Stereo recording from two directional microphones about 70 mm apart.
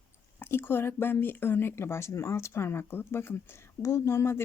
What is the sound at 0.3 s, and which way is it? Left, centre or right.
Speech, left.